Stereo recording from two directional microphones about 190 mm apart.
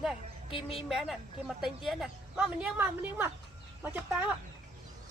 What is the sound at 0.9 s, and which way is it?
A woman's voice, centre (ahead or behind).